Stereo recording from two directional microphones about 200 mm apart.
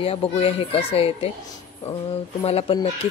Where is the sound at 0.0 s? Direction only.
30° left (ahead or behind).